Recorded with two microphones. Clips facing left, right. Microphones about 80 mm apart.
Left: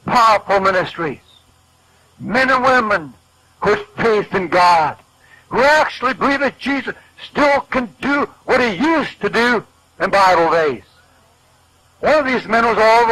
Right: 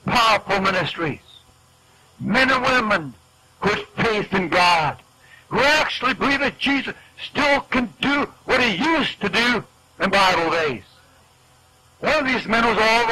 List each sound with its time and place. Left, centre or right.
0.0 s speech: left
2.3 s speech: left
3.5 s a sound: left
4.3 s speech: left
7.4 s speech: left
9.3 s speech: left
12.0 s speech: left
12.8 s speech: left